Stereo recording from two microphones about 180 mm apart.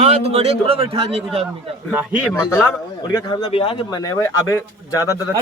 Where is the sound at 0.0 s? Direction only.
35° right (ahead or behind).